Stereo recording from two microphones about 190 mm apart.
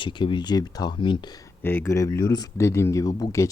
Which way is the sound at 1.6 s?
10° left (ahead or behind).